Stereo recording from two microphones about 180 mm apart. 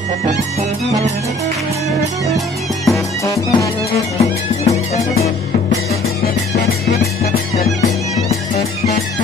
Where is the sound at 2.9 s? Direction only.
20° left (ahead or behind).